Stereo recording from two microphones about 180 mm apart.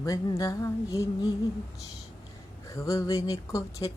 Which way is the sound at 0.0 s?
20° left (ahead or behind).